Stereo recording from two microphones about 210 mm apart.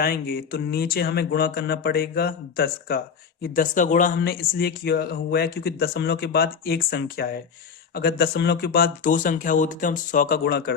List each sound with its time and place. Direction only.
0.0 s speech: 45° left (ahead or behind)